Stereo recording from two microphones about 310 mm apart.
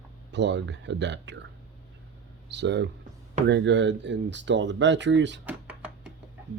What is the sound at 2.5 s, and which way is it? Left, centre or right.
Speech, right.